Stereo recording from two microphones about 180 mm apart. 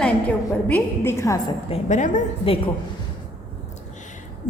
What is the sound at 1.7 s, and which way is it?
Speech, 40° left (ahead or behind).